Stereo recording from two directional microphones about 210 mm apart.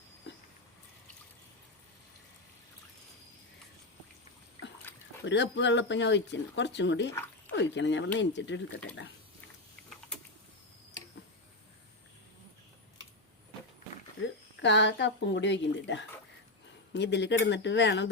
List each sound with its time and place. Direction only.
4.9 s dog: 10° left (ahead or behind)
5.2 s speech: 60° left (ahead or behind)
7.1 s a sound: 10° left (ahead or behind)
7.5 s speech: 55° left (ahead or behind)
14.6 s speech: 55° left (ahead or behind)